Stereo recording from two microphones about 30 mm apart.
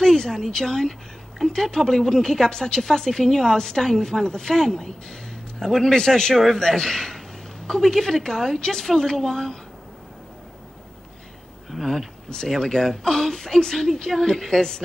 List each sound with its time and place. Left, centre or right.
0.0 s a woman's voice: centre
11.7 s speech: centre
12.4 s a woman's voice: centre